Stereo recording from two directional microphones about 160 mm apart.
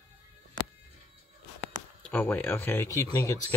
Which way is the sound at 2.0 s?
10° left (ahead or behind).